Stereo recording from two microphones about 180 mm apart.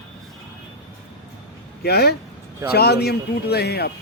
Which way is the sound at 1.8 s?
65° left (ahead or behind).